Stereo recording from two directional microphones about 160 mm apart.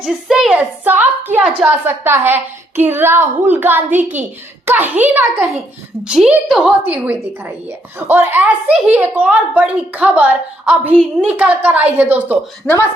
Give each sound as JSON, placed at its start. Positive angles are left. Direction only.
{"t": 0.0, "sound": "a woman's voice", "side_deg": 0}
{"t": 12.6, "sound": "speech", "side_deg": 15}